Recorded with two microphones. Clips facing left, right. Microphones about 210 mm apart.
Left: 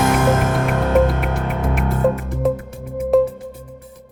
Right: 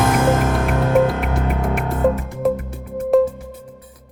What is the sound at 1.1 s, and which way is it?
Music, centre (ahead or behind).